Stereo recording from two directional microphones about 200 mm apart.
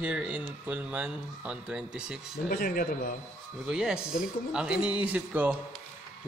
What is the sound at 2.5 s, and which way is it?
Speech, 45° left (ahead or behind).